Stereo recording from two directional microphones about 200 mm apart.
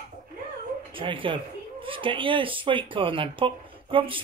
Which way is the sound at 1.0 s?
25° right (ahead or behind).